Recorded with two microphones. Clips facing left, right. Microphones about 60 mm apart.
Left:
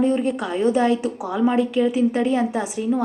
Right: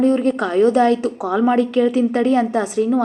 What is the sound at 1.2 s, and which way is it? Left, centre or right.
A woman's voice, right.